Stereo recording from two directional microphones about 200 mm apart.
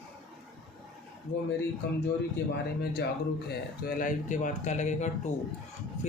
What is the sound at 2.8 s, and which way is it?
Speech, 55° left (ahead or behind).